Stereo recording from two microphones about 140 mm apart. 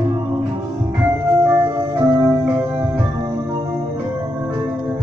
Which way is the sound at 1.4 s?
25° right (ahead or behind).